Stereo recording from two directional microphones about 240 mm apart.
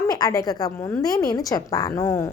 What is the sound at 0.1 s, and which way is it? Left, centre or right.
A woman's voice, centre.